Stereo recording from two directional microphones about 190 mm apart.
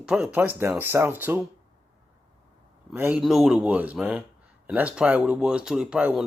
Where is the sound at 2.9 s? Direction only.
5° right (ahead or behind).